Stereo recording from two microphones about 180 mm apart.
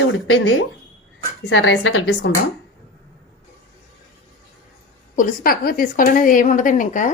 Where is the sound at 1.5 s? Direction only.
90° left.